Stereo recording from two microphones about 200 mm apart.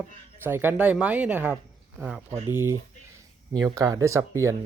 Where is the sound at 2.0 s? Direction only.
5° right (ahead or behind).